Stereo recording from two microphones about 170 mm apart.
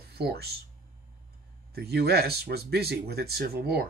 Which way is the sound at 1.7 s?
70° right (ahead or behind).